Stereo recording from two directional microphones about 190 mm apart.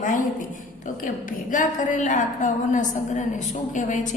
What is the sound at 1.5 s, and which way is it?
A woman's voice, 40° left (ahead or behind).